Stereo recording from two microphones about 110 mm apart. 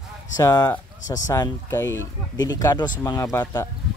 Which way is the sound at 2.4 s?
35° left (ahead or behind).